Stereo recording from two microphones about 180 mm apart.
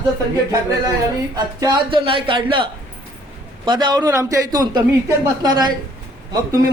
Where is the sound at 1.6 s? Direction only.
30° right (ahead or behind).